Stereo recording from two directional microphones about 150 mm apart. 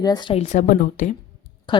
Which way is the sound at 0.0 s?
30° left (ahead or behind).